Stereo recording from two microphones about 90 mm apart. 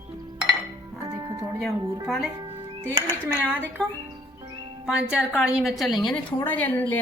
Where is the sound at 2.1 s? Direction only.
Centre (ahead or behind).